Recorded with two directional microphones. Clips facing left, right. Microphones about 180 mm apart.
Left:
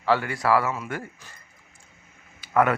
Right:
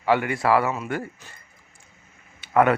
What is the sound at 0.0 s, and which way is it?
Speech, 15° right (ahead or behind).